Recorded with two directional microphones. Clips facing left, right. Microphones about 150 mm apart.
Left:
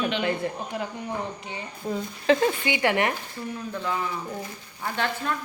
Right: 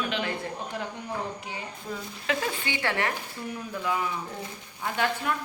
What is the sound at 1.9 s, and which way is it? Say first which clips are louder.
Speech: left 9 dB; 30° left (ahead or behind).